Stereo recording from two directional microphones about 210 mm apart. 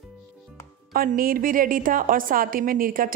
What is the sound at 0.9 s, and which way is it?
A woman's voice, 45° right (ahead or behind).